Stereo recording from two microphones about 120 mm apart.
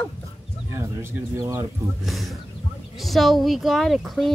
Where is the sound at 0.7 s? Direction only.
20° right (ahead or behind).